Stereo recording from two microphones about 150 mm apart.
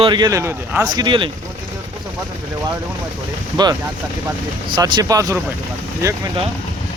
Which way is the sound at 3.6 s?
30° right (ahead or behind).